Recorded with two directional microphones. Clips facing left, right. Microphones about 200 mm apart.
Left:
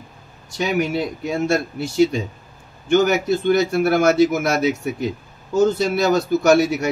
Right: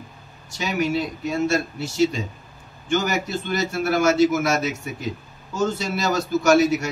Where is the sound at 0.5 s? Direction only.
55° left (ahead or behind).